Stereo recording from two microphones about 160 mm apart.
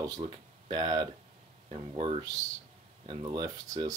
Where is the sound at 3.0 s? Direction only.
30° right (ahead or behind).